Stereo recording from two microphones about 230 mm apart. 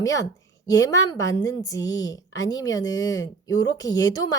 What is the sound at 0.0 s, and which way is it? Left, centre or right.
A woman's voice, centre.